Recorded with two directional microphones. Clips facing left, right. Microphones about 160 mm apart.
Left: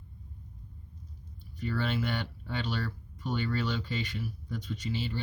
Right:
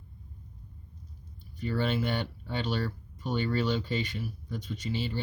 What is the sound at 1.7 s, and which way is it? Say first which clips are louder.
Speech: right 3 dB; 25° right (ahead or behind).